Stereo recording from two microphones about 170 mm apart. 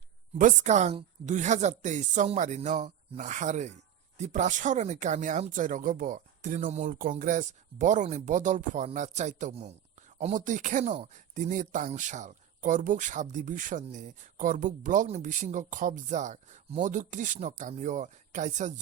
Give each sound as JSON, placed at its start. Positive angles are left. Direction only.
{"t": 0.3, "sound": "speech", "side_deg": -45}